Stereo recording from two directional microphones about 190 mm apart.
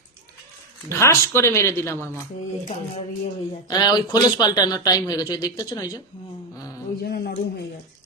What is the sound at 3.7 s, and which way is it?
A man's voice, 20° left (ahead or behind).